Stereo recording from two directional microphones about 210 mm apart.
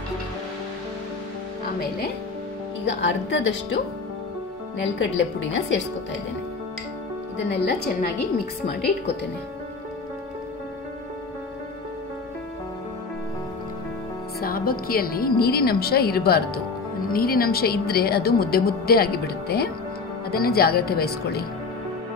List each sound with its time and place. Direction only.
2.8 s speech: 60° left (ahead or behind)
4.9 s speech: 60° left (ahead or behind)
7.3 s a woman's voice: 50° left (ahead or behind)
14.4 s a woman's voice: 45° left (ahead or behind)